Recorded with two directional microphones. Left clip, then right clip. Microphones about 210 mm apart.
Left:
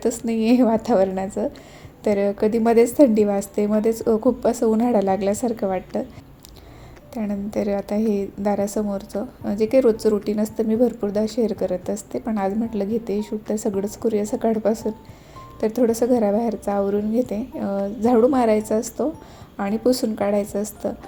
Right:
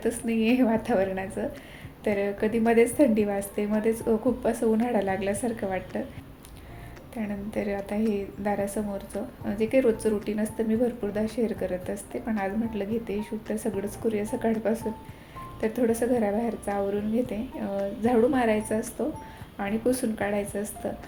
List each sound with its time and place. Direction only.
0.0 s a woman's voice: 45° left (ahead or behind)
7.1 s a woman's voice: 40° left (ahead or behind)